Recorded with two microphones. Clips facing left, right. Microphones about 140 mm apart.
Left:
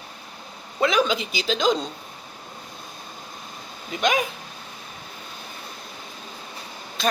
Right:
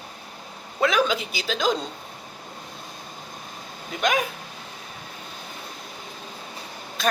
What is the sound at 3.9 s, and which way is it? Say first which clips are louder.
Speech: left 1 dB; 5° left (ahead or behind).